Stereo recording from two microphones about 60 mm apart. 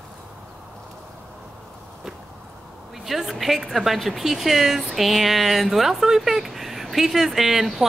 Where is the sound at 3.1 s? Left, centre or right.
Centre.